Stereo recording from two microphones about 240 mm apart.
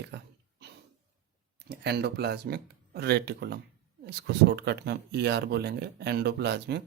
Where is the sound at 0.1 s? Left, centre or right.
Right.